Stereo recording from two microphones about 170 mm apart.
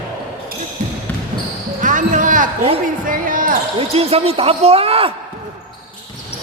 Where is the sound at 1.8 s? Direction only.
50° right (ahead or behind).